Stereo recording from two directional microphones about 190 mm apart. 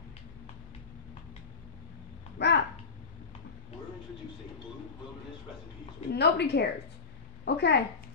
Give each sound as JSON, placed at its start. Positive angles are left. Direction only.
{"t": 2.3, "sound": "babbling", "side_deg": 60}
{"t": 6.1, "sound": "a woman's voice", "side_deg": 60}